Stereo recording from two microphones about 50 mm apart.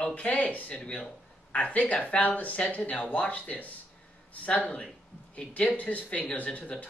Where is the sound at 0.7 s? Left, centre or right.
Left.